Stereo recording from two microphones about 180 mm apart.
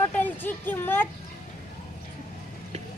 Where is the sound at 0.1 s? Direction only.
10° left (ahead or behind).